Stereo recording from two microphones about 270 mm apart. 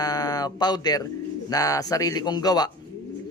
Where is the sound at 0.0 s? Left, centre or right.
Centre.